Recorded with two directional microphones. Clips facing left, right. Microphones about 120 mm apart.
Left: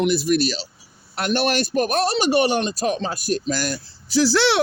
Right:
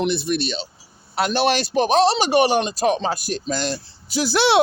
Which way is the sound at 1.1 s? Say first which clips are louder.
Right 2 dB; 90° right.